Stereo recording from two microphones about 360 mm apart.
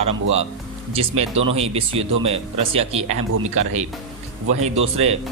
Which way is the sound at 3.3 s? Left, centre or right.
Right.